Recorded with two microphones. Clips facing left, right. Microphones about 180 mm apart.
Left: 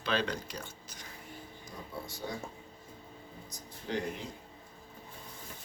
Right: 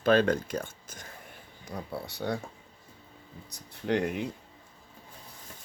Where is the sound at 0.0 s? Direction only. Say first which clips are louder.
Right 10 dB; 50° right (ahead or behind).